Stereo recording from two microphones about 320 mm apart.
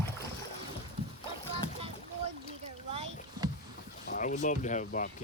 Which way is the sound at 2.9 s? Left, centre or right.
Centre.